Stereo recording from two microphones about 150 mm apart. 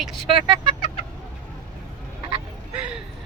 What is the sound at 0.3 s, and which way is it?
Speech, 35° right (ahead or behind).